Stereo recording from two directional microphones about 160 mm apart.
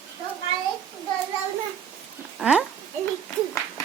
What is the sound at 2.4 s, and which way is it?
Speech, 5° right (ahead or behind).